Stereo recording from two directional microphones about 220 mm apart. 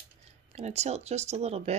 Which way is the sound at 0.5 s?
30° right (ahead or behind).